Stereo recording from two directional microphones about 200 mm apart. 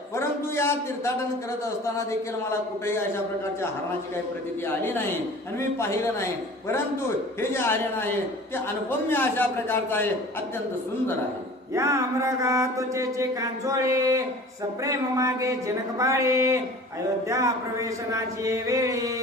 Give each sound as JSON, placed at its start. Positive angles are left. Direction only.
{"t": 0.2, "sound": "a sound", "side_deg": 15}
{"t": 1.8, "sound": "a man's voice", "side_deg": 15}
{"t": 4.6, "sound": "a man's voice", "side_deg": 10}
{"t": 7.5, "sound": "a man's voice", "side_deg": 10}
{"t": 11.7, "sound": "mantra", "side_deg": -15}